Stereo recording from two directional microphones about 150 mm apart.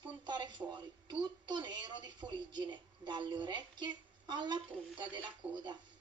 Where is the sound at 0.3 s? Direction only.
30° right (ahead or behind).